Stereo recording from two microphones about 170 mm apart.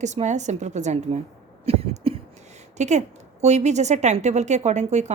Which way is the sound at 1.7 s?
35° right (ahead or behind).